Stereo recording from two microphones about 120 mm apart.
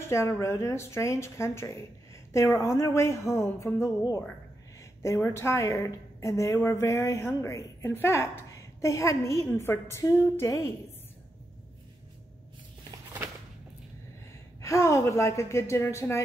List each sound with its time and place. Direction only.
0.0 s a woman's voice: 25° left (ahead or behind)
5.0 s a woman's voice: 20° left (ahead or behind)
14.6 s a woman's voice: 25° left (ahead or behind)